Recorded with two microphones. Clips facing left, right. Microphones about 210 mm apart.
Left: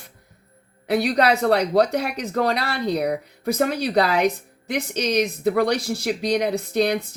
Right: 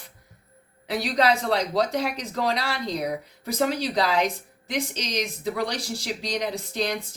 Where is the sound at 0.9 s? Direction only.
55° left (ahead or behind).